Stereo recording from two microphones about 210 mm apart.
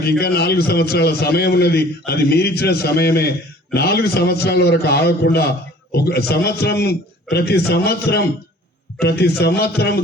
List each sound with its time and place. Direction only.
0.0 s a man's voice: 50° left (ahead or behind)